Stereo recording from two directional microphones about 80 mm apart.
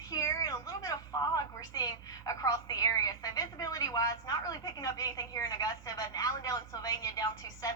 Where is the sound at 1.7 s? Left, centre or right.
Left.